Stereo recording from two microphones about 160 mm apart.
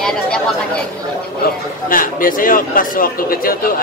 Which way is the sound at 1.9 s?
60° left (ahead or behind).